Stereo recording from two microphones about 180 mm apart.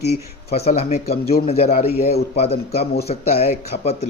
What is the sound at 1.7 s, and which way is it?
Speech, 60° left (ahead or behind).